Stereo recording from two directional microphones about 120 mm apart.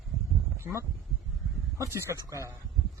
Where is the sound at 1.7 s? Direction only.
25° right (ahead or behind).